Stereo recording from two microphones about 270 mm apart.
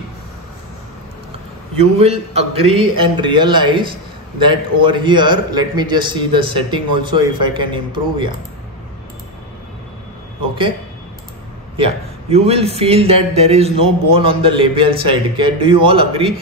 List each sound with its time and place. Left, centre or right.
2.0 s a man's voice: right
11.7 s a man's voice: right